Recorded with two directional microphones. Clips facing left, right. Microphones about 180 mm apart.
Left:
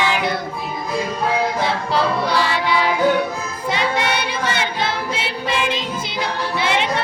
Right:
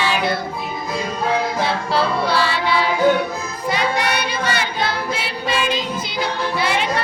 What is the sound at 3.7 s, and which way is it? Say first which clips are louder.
Child singing: even; 25° left (ahead or behind).